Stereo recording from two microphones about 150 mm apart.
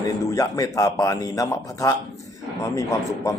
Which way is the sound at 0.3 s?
20° left (ahead or behind).